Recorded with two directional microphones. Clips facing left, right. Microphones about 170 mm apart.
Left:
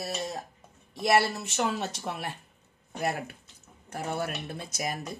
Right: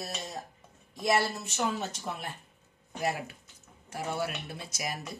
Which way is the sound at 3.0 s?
55° left (ahead or behind).